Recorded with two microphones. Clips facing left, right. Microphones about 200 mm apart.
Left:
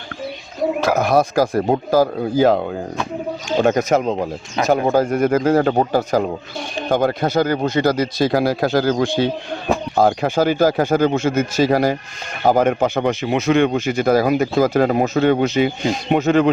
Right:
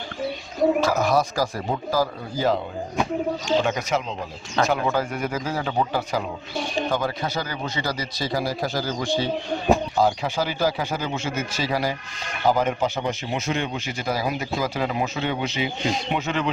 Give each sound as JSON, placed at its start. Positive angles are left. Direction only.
{"t": 0.8, "sound": "speech", "side_deg": 55}
{"t": 3.6, "sound": "speech", "side_deg": 45}